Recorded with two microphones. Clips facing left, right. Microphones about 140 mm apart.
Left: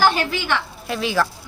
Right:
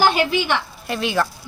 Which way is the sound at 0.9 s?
Centre (ahead or behind).